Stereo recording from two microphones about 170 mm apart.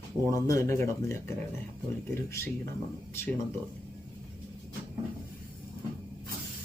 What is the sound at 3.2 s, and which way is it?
Speech, 15° left (ahead or behind).